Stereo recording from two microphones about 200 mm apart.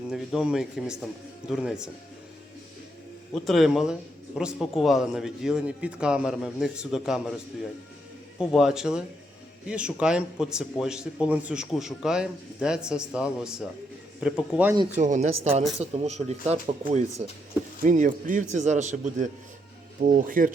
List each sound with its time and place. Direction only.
0.1 s a man's voice: centre (ahead or behind)
3.4 s a man's voice: centre (ahead or behind)
8.4 s a man's voice: 5° right (ahead or behind)
14.9 s speech: 35° right (ahead or behind)